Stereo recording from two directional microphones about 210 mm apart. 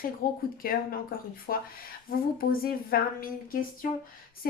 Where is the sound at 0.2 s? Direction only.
45° left (ahead or behind).